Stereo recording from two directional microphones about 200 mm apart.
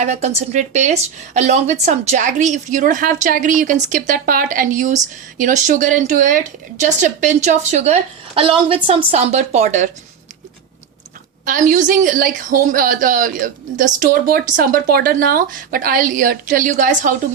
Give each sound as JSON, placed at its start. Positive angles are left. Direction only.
{"t": 0.0, "sound": "speech", "side_deg": -35}
{"t": 11.4, "sound": "a woman's voice", "side_deg": -40}